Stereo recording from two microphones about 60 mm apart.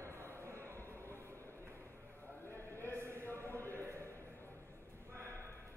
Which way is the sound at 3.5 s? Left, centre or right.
Left.